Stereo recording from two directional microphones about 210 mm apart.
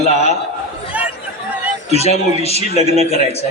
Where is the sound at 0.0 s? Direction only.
30° left (ahead or behind).